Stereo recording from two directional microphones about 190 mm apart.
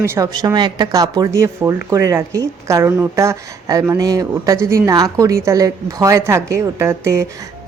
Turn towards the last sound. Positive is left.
turn(degrees=-15)  # may be behind; listen again after turning